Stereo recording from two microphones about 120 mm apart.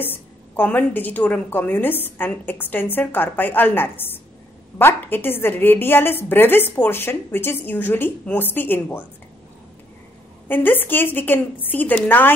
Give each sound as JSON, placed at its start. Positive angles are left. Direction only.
{"t": 0.0, "sound": "a woman's voice", "side_deg": 15}
{"t": 10.5, "sound": "a woman's voice", "side_deg": 15}